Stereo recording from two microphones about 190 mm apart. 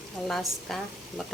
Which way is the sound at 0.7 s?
Centre (ahead or behind).